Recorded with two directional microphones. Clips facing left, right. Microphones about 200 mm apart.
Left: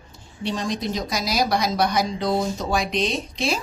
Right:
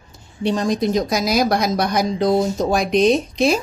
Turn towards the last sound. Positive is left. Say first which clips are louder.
# right 9 dB
turn(degrees=-45)  # may be behind; listen again after turning